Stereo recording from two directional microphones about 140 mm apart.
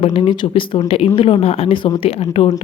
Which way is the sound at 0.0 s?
40° left (ahead or behind).